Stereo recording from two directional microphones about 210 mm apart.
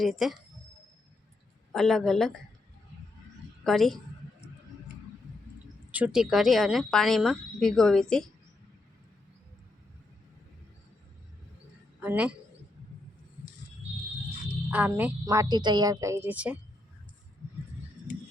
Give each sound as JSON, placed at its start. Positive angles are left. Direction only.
{"t": 0.0, "sound": "a woman's voice", "side_deg": 0}
{"t": 1.7, "sound": "a woman's voice", "side_deg": 0}
{"t": 3.6, "sound": "a sound", "side_deg": 0}
{"t": 5.9, "sound": "a woman's voice", "side_deg": -5}
{"t": 11.9, "sound": "speech", "side_deg": -5}
{"t": 14.7, "sound": "speech", "side_deg": -10}